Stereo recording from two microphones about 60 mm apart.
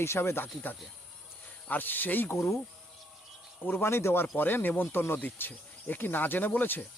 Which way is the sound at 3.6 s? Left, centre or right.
Left.